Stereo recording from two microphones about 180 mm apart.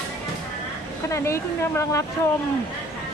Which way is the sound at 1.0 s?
15° left (ahead or behind).